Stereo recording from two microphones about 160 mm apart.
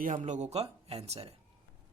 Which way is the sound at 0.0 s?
55° right (ahead or behind).